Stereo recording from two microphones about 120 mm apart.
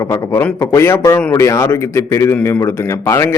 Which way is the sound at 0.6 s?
20° left (ahead or behind).